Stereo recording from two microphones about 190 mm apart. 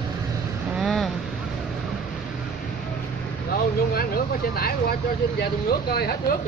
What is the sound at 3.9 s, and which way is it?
Speech, 55° left (ahead or behind).